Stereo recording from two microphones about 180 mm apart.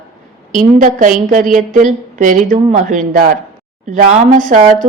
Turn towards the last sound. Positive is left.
turn(degrees=-45)  # may be behind; listen again after turning